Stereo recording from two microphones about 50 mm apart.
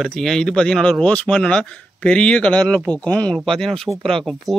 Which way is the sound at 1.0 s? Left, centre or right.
Left.